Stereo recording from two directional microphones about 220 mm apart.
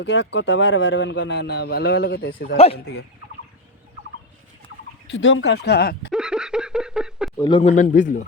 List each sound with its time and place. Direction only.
0.0 s speech: 55° left (ahead or behind)
5.0 s speech: 60° left (ahead or behind)
6.1 s a sound: 5° right (ahead or behind)
7.3 s speech: 20° left (ahead or behind); by 8.2 s 35° left (ahead or behind)